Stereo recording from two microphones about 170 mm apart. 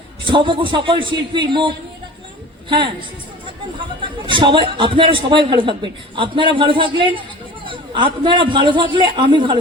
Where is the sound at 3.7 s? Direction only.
30° right (ahead or behind).